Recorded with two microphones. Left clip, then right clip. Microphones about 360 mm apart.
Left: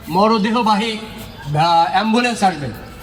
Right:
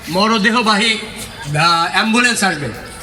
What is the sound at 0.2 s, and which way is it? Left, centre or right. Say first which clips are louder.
Speech: right 1 dB; centre.